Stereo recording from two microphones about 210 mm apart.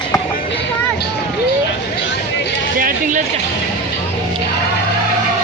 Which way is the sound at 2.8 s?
40° right (ahead or behind).